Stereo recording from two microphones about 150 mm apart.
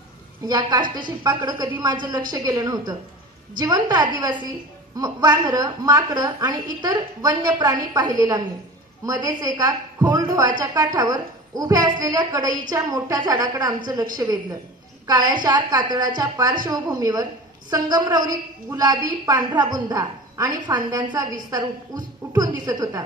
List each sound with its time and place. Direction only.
0.5 s a woman's voice: 30° right (ahead or behind)